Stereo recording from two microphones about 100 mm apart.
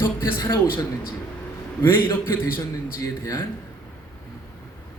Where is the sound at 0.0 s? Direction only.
35° left (ahead or behind).